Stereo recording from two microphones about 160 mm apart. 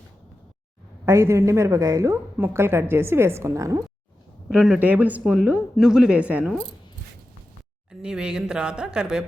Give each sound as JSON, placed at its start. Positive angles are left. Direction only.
{"t": 1.0, "sound": "a woman's voice", "side_deg": -15}
{"t": 4.4, "sound": "speech", "side_deg": -5}
{"t": 8.0, "sound": "speech", "side_deg": -5}